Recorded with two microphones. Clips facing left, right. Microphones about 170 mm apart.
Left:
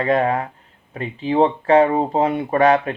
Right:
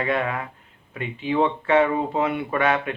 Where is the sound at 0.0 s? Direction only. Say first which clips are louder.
Left 6 dB; 40° left (ahead or behind).